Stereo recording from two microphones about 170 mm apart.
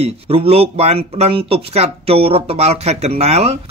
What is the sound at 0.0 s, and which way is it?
Speech, 35° right (ahead or behind).